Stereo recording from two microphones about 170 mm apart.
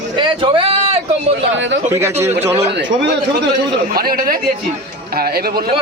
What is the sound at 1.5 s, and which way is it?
Speech, 90° right.